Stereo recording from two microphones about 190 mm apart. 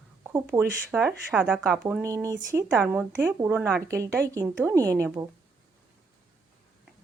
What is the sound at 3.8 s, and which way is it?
Speech, 15° right (ahead or behind).